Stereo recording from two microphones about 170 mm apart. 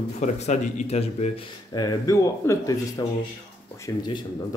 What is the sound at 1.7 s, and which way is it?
Speech, 25° left (ahead or behind).